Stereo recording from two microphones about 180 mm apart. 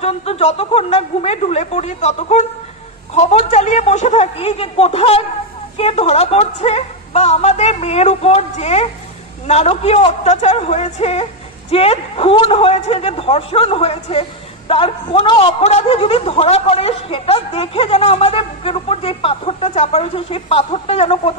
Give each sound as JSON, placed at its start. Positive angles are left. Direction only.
{"t": 0.0, "sound": "a man's voice", "side_deg": 35}